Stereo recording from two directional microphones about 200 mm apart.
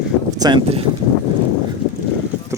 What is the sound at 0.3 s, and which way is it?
Speech, 20° right (ahead or behind).